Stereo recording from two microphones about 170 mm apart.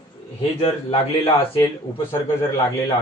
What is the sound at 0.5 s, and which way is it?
Speech, 35° left (ahead or behind).